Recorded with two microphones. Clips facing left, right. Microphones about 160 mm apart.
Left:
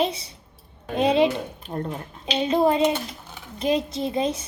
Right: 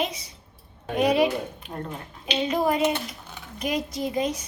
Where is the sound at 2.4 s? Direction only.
25° left (ahead or behind).